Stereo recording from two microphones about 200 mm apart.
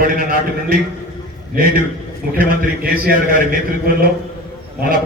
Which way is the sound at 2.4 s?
45° right (ahead or behind).